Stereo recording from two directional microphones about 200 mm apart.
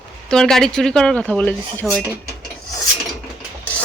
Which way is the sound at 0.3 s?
Centre (ahead or behind).